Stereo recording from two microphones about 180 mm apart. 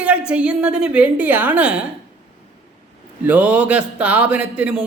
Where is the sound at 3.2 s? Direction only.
10° right (ahead or behind).